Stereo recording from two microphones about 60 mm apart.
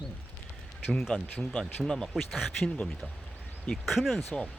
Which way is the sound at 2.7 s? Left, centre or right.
Centre.